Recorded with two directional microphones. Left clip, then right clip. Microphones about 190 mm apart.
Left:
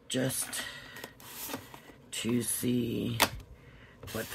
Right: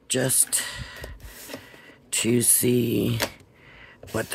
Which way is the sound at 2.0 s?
55° right (ahead or behind).